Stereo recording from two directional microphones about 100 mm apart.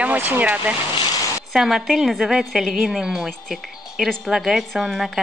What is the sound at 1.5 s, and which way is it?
A woman's voice, 5° right (ahead or behind).